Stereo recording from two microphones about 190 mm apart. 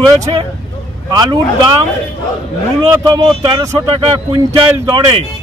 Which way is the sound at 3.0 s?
25° right (ahead or behind).